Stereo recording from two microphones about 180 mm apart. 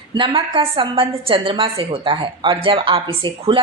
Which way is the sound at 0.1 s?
25° right (ahead or behind).